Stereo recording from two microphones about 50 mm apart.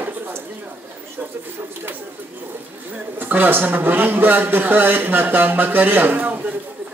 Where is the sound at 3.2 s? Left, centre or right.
Right.